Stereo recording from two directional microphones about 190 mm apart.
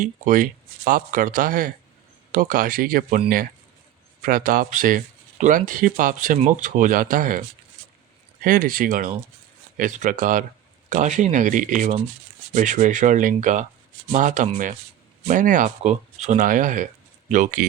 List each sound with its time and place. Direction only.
0.0 s speech: 45° right (ahead or behind)
4.2 s speech: 50° right (ahead or behind)
8.4 s speech: 45° right (ahead or behind)